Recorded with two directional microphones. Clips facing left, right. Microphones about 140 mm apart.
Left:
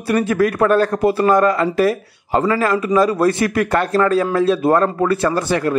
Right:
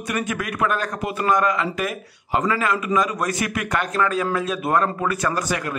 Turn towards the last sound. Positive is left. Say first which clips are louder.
# left 7 dB
turn(degrees=30)  # may be behind; listen again after turning